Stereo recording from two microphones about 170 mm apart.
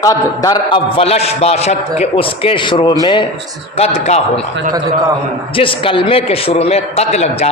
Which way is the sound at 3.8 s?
40° left (ahead or behind).